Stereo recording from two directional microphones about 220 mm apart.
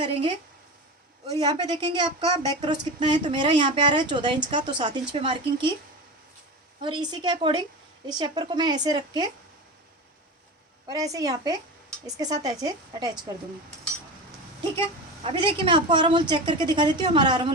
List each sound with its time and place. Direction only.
0.0 s a woman's voice: 25° right (ahead or behind)
1.4 s a woman's voice: 20° right (ahead or behind)
6.8 s a woman's voice: 20° right (ahead or behind)
10.8 s a woman's voice: 15° right (ahead or behind)
15.2 s a woman's voice: 25° right (ahead or behind)